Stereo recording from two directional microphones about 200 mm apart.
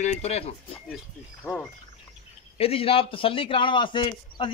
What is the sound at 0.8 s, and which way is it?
Speech, centre (ahead or behind).